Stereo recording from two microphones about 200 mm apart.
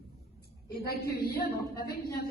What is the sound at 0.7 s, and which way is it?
Speech, 50° left (ahead or behind).